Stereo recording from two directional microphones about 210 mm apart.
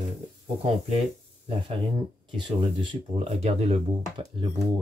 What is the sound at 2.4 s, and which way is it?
Speech, 25° right (ahead or behind).